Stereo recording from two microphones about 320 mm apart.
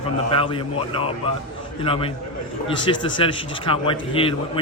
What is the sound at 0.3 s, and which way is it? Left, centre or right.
A man's voice, centre.